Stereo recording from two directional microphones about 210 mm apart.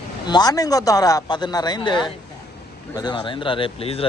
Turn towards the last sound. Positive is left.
turn(degrees=25)  # may be behind; listen again after turning